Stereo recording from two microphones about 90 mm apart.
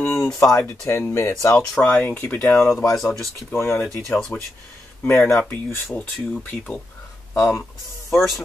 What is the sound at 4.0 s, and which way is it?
Speech, centre (ahead or behind).